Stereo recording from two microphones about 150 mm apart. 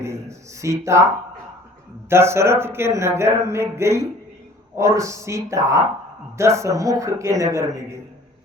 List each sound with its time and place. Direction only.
0.0 s a man's voice: 20° right (ahead or behind)